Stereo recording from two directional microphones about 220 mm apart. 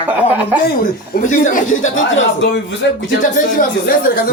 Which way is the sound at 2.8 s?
50° left (ahead or behind).